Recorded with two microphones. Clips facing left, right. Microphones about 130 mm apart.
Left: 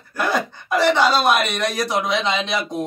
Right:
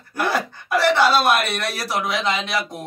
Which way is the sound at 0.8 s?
15° left (ahead or behind).